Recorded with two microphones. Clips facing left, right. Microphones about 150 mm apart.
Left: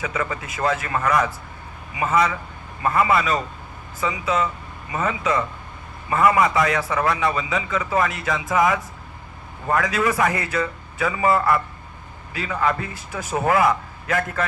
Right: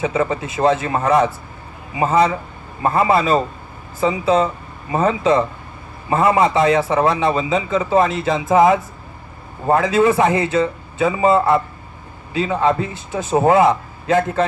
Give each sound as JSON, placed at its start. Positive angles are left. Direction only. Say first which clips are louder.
{"t": 0.0, "sound": "a man's voice", "louder": "right 7 dB", "side_deg": -25}